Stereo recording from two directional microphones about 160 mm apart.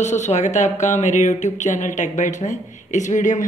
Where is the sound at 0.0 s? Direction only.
45° left (ahead or behind).